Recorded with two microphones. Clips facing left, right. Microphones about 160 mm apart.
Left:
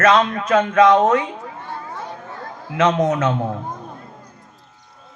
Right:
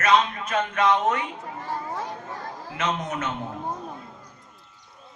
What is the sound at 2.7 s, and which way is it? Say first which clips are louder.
Speech: left 11 dB; 90° left.